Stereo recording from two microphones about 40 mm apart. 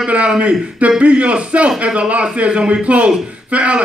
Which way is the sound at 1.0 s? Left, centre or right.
Right.